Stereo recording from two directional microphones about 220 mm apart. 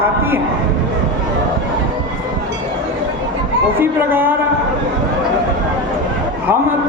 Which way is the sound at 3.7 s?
10° right (ahead or behind).